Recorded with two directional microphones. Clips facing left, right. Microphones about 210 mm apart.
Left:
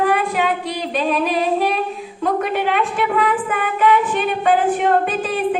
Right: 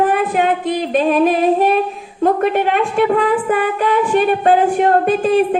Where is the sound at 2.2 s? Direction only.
45° right (ahead or behind).